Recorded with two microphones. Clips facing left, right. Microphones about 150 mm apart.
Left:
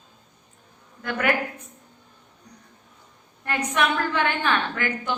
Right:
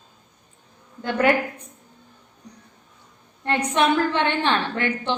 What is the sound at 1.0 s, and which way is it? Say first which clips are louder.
Speech: right 6 dB; 30° right (ahead or behind).